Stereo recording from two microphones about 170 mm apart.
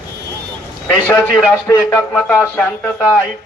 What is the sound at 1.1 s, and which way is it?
A man's voice, 10° left (ahead or behind).